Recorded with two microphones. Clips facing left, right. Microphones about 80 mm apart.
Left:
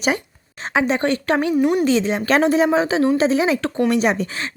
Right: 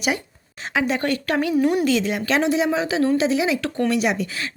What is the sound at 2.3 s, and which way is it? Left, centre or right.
A woman's voice, left.